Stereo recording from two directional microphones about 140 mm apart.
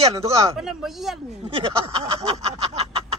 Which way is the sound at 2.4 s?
50° right (ahead or behind).